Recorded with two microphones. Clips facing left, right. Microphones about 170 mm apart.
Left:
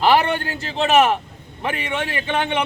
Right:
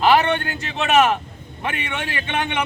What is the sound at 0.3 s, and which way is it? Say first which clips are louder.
A man's voice: right 1 dB; 35° left (ahead or behind).